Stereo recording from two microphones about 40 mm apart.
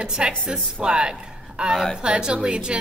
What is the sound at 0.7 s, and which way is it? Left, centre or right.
A woman's voice, right.